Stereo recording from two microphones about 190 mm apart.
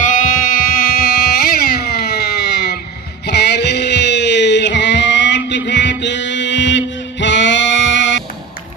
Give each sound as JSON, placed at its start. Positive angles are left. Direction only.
{"t": 0.0, "sound": "music", "side_deg": 45}